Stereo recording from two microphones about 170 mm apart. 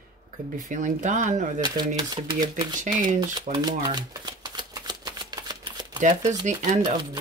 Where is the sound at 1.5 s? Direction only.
25° right (ahead or behind).